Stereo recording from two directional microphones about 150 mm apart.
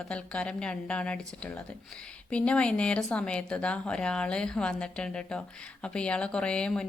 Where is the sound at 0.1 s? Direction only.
5° left (ahead or behind).